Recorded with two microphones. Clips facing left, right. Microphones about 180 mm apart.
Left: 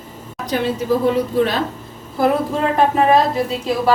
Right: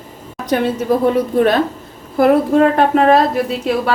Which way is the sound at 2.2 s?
65° right (ahead or behind).